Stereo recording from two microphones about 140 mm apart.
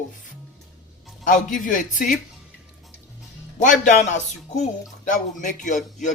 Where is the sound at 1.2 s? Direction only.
70° left (ahead or behind).